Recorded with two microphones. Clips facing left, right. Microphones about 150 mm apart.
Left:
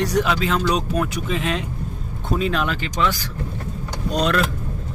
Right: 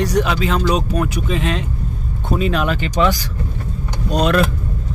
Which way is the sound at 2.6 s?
15° right (ahead or behind).